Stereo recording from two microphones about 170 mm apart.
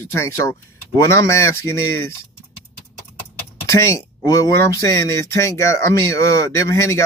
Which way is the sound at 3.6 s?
15° left (ahead or behind).